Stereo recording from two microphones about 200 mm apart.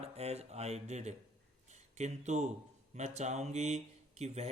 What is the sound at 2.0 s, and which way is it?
Speech, 35° right (ahead or behind).